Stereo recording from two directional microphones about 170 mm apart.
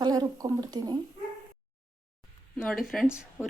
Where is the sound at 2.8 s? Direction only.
Centre (ahead or behind).